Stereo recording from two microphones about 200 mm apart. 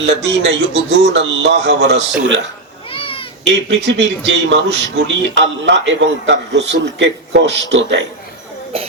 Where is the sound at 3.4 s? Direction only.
60° right (ahead or behind).